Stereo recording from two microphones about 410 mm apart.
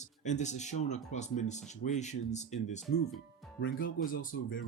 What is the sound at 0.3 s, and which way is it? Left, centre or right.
Speech, centre.